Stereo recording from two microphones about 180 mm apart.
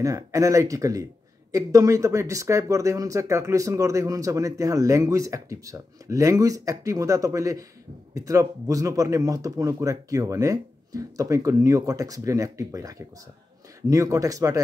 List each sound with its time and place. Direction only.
0.0 s speech: 20° right (ahead or behind)